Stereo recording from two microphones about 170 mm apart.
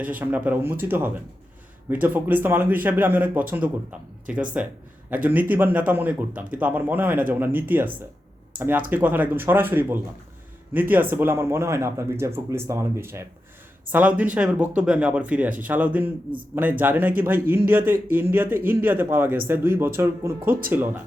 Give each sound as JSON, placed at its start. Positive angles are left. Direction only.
{"t": 0.0, "sound": "a man's voice", "side_deg": -10}